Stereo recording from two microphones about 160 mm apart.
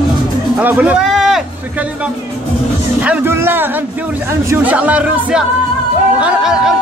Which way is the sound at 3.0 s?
10° right (ahead or behind).